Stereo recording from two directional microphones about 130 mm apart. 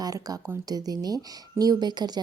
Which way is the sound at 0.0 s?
30° right (ahead or behind).